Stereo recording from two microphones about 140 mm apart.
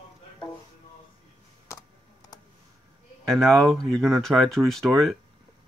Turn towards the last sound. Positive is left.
turn(degrees=0)  # may be behind; listen again after turning